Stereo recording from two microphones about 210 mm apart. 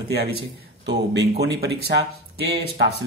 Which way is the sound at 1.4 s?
50° right (ahead or behind).